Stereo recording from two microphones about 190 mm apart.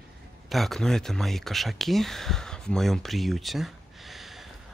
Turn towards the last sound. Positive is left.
turn(degrees=0)  # may be behind; listen again after turning